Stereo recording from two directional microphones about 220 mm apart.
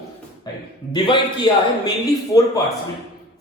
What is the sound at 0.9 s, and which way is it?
A man's voice, 20° left (ahead or behind).